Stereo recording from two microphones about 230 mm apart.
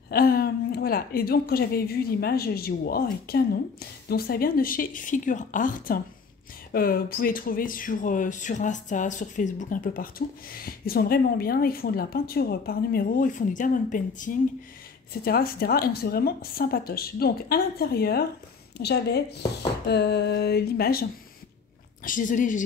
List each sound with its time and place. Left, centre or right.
0.1 s speech: left
18.8 s a sound: left
22.0 s speech: left